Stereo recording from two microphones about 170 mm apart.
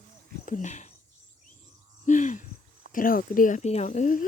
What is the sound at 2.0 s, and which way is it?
Speech, 45° left (ahead or behind).